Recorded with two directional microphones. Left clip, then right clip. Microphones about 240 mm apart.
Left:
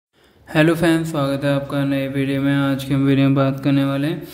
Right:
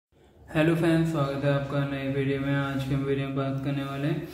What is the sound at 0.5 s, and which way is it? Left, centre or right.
Mantra, left.